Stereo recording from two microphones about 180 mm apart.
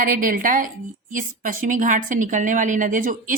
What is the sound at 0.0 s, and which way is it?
Speech, 50° right (ahead or behind).